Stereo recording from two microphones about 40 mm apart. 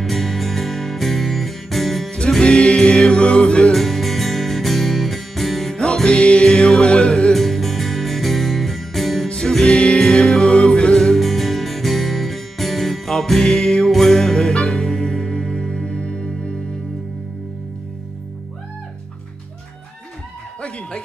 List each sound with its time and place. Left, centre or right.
0.0 s music: centre
2.4 s music: left
3.7 s music: centre
5.8 s music: centre
7.3 s music: centre
9.3 s music: centre
15.3 s music: centre